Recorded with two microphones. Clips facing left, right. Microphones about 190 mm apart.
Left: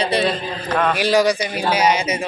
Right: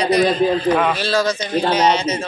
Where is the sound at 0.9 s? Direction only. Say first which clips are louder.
Left 3 dB; 15° left (ahead or behind).